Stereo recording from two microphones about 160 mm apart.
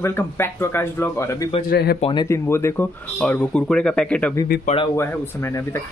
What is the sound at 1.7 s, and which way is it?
Speech, 75° left (ahead or behind).